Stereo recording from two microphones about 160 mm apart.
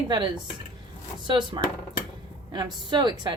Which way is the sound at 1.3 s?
30° right (ahead or behind).